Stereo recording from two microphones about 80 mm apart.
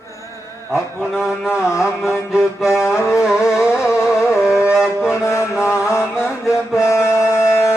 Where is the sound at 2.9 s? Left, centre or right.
Left.